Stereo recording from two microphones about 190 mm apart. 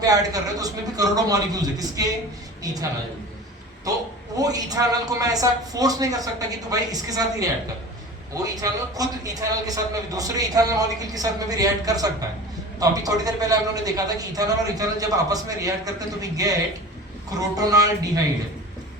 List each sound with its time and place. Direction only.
0.0 s a man's voice: 20° right (ahead or behind)
4.4 s a man's voice: 20° right (ahead or behind)